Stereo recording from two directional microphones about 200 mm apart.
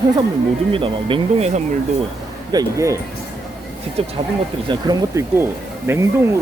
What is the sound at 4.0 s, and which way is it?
Speech, 30° right (ahead or behind).